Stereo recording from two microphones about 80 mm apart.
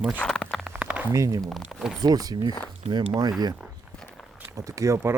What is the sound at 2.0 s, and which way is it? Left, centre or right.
Speech, right.